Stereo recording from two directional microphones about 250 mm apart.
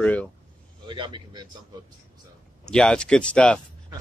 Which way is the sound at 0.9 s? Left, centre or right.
Centre.